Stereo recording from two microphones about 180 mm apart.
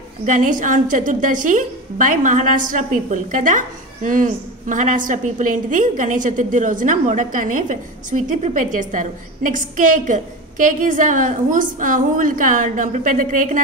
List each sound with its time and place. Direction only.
0.2 s a woman's voice: 45° right (ahead or behind)